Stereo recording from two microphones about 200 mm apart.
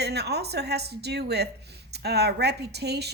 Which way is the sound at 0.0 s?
55° right (ahead or behind).